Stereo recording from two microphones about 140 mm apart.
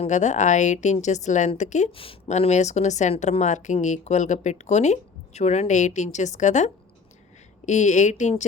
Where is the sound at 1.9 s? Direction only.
45° left (ahead or behind).